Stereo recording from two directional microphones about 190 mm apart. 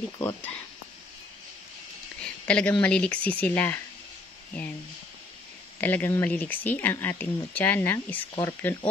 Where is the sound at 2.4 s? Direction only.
5° left (ahead or behind).